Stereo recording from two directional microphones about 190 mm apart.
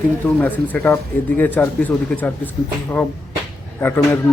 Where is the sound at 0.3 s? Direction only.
10° left (ahead or behind).